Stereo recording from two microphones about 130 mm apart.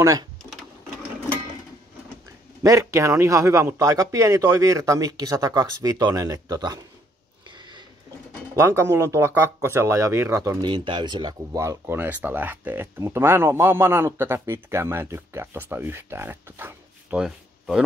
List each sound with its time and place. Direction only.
0.0 s speech: 25° right (ahead or behind)
2.6 s speech: 25° right (ahead or behind)
7.4 s a sound: 35° right (ahead or behind)
8.5 s speech: 20° right (ahead or behind)
10.7 s speech: 40° right (ahead or behind); by 17.8 s 5° right (ahead or behind)